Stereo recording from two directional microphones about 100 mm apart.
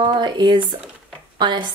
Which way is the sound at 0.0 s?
55° right (ahead or behind).